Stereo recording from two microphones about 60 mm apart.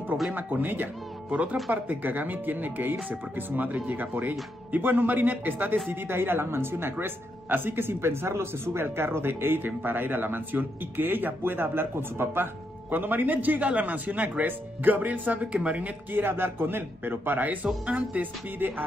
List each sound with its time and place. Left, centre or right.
0.3 s speech: right
16.1 s speech: right